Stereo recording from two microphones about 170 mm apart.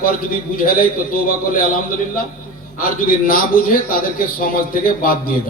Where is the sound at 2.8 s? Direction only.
55° left (ahead or behind).